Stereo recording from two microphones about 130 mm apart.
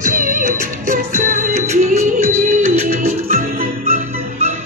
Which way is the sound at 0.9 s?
70° right (ahead or behind).